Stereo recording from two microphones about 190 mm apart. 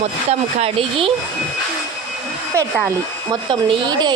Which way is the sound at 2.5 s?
15° right (ahead or behind).